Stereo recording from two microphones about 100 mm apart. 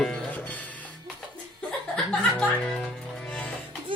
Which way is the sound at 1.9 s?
10° left (ahead or behind).